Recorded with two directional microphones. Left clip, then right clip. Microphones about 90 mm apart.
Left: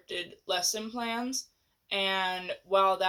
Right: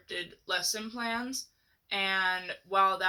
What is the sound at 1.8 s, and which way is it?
Speech, 20° left (ahead or behind).